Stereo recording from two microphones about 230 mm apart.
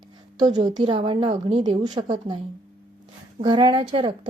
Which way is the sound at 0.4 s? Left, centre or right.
Centre.